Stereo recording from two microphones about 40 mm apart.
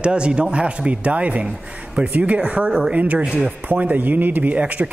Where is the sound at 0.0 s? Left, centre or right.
Right.